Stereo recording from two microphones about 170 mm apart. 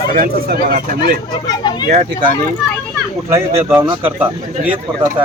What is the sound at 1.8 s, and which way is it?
Speech, 45° right (ahead or behind).